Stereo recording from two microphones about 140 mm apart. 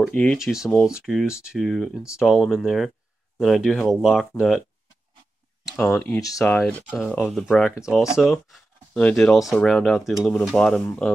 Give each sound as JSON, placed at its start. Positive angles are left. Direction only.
{"t": 0.0, "sound": "speech", "side_deg": 5}
{"t": 5.8, "sound": "speech", "side_deg": 10}
{"t": 6.1, "sound": "speech", "side_deg": 25}
{"t": 6.4, "sound": "speech", "side_deg": 10}